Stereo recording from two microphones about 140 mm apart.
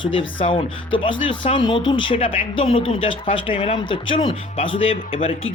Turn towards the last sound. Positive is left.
turn(degrees=40)  # may be behind; listen again after turning